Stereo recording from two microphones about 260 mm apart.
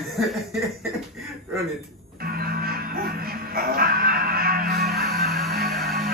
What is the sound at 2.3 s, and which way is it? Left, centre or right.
Music, right.